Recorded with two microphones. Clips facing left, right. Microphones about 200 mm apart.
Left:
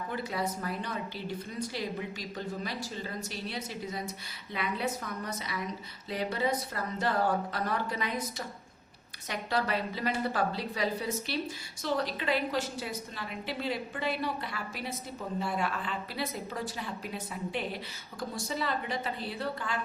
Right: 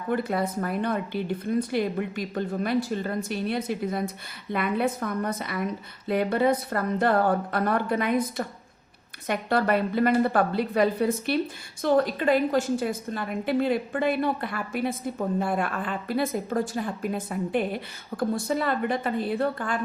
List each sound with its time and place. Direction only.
0.1 s a woman's voice: 55° right (ahead or behind)